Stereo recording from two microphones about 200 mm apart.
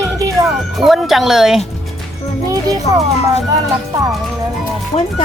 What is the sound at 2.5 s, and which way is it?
Speech, 20° right (ahead or behind).